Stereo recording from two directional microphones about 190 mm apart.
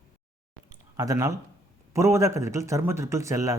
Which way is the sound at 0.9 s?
20° right (ahead or behind).